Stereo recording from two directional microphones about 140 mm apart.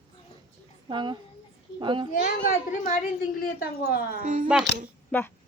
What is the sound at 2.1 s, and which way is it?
A woman's voice, 90° left.